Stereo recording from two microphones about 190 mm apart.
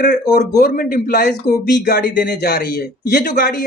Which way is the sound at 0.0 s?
55° left (ahead or behind).